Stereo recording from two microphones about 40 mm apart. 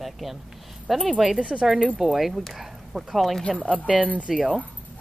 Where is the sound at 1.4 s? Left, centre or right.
Right.